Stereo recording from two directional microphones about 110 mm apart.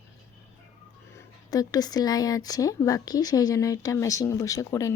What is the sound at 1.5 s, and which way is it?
Speech, 35° left (ahead or behind).